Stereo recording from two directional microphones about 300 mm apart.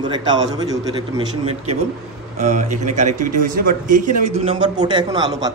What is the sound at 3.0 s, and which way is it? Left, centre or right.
A man's voice, right.